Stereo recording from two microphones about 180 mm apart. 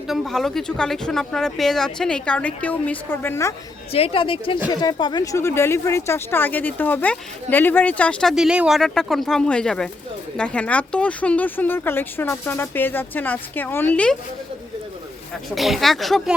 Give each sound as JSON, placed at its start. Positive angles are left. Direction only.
{"t": 0.1, "sound": "speech", "side_deg": 0}
{"t": 3.9, "sound": "speech", "side_deg": 30}
{"t": 15.4, "sound": "speech", "side_deg": 0}